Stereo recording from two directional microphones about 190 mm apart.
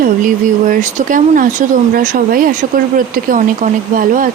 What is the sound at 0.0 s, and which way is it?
Speech, 45° right (ahead or behind).